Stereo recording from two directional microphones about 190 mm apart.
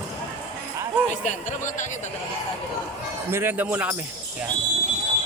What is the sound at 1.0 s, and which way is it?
Speech, 40° left (ahead or behind).